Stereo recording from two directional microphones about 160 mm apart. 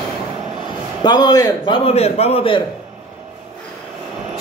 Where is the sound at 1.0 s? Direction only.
25° left (ahead or behind).